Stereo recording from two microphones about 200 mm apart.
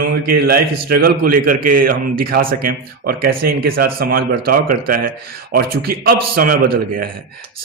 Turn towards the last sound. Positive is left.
turn(degrees=-45)  # may be behind; listen again after turning